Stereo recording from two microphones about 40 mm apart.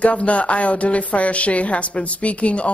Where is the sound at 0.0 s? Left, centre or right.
Left.